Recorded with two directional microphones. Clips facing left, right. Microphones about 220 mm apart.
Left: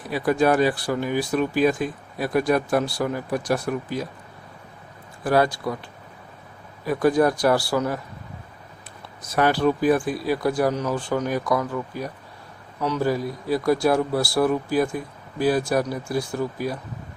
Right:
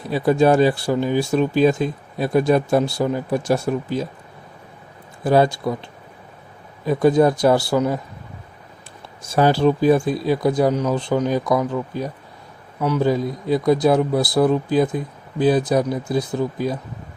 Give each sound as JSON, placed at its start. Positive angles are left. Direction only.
{"t": 0.0, "sound": "speech", "side_deg": -25}
{"t": 5.2, "sound": "speech", "side_deg": -25}
{"t": 9.2, "sound": "speech", "side_deg": -30}